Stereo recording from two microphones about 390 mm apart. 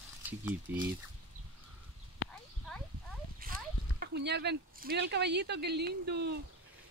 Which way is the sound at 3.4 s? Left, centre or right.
Right.